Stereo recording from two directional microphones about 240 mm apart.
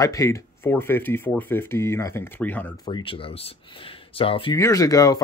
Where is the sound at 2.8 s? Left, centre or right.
Left.